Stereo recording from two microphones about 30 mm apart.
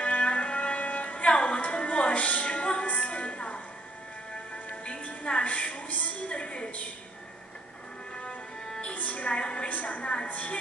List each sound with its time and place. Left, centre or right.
0.0 s music: left
2.2 s music: left
4.9 s music: left
5.5 s a sound: left
6.3 s a sound: left
8.9 s music: left
9.4 s a woman's voice: left
9.7 s a woman's voice: left